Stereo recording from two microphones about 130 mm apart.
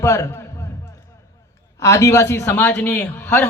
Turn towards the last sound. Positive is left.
turn(degrees=15)  # may be behind; listen again after turning